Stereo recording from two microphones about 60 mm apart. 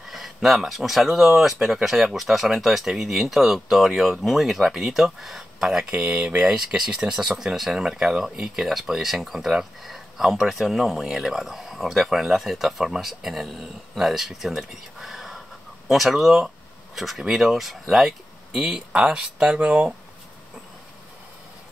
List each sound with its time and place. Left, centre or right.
0.0 s speech: centre